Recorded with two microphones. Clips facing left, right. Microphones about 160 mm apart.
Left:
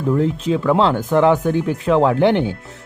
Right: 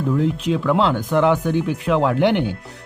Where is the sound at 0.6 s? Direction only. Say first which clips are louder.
Left 3 dB; 30° left (ahead or behind).